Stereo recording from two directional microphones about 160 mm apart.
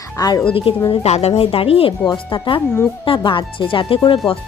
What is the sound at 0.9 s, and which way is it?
A woman's voice, 40° left (ahead or behind).